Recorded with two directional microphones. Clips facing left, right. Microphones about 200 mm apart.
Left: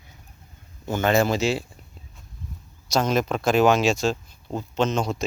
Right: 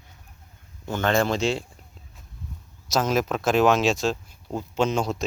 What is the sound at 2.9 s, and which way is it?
Speech, 5° right (ahead or behind).